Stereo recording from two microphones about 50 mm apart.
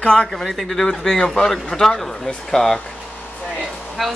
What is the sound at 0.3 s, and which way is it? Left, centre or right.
Speech, centre.